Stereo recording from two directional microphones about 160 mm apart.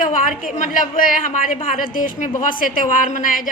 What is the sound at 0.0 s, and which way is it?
A woman's voice, 55° left (ahead or behind).